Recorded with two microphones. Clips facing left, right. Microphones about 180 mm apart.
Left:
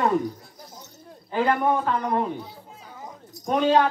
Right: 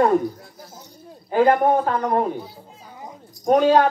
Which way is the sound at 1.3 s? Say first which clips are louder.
Right 6 dB; 45° right (ahead or behind).